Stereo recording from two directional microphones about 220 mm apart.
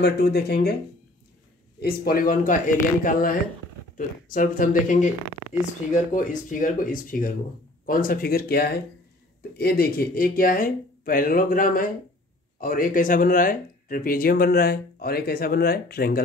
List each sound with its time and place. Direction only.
0.0 s speech: 50° left (ahead or behind)
1.8 s speech: 45° left (ahead or behind)